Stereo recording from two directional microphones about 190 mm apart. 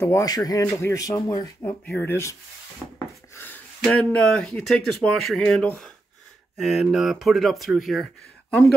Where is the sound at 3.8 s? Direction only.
5° left (ahead or behind).